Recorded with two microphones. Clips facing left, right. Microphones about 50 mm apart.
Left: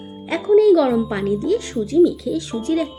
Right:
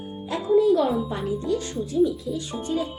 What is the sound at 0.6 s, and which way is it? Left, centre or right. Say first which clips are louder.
A child's voice: left 6 dB; left.